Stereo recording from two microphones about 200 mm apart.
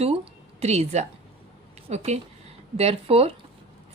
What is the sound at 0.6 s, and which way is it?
A woman's voice, 35° right (ahead or behind).